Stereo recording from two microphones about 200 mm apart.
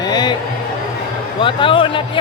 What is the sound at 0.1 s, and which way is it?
Music, 20° left (ahead or behind).